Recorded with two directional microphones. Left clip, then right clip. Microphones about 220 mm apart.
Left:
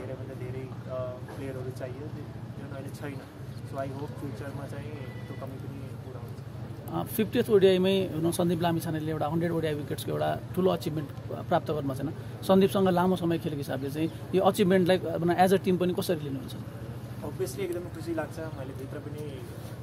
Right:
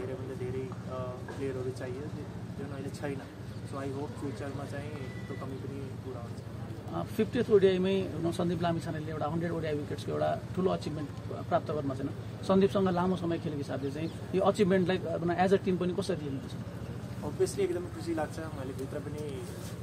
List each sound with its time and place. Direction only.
7.0 s speech: 55° left (ahead or behind)
17.4 s speech: centre (ahead or behind)